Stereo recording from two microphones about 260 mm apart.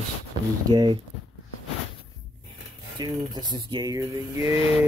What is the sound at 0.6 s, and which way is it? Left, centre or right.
Speech, centre.